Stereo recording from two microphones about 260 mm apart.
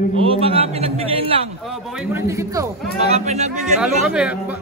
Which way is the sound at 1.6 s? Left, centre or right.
Centre.